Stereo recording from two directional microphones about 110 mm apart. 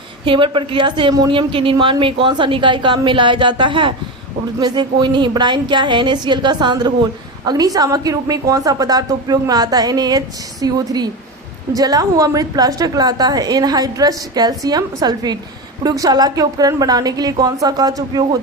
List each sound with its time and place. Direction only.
0.3 s a woman's voice: 50° right (ahead or behind)